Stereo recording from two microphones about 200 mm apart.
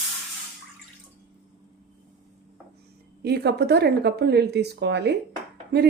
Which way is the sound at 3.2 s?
55° right (ahead or behind).